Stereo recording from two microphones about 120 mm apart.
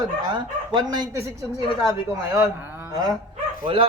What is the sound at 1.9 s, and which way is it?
Speech, 25° right (ahead or behind).